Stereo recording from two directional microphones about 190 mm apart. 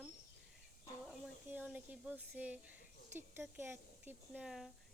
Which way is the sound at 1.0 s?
10° right (ahead or behind).